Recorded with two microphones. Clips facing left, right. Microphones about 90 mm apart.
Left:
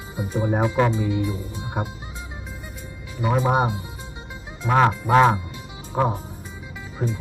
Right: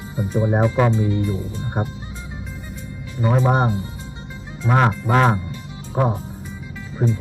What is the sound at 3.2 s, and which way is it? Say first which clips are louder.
Speech: right 2 dB; 10° left (ahead or behind).